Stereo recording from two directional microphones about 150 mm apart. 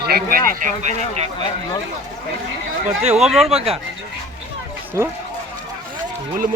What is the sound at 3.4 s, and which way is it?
Speech, 40° right (ahead or behind).